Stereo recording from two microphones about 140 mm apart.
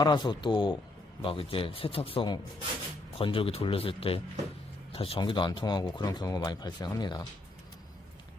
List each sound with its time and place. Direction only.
0.0 s speech: 30° left (ahead or behind)